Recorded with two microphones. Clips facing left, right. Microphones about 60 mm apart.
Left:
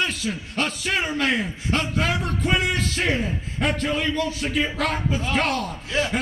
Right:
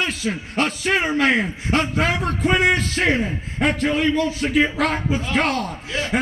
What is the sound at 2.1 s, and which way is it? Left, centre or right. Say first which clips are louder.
A man's voice: right 3 dB; right.